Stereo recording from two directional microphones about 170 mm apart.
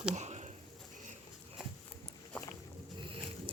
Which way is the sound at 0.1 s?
45° right (ahead or behind).